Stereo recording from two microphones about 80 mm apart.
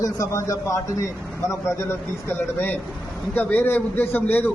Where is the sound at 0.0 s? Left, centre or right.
Left.